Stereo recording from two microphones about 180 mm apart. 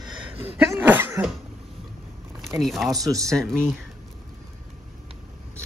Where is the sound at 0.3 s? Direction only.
30° right (ahead or behind).